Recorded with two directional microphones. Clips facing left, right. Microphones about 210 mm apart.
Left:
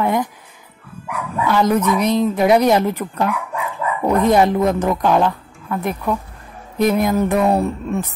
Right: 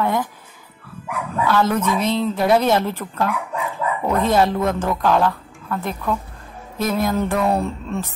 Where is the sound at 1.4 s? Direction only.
15° left (ahead or behind).